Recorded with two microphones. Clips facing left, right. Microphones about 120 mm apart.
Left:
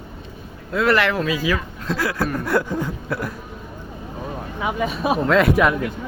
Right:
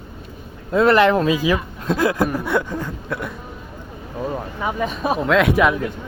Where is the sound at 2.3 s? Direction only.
5° right (ahead or behind).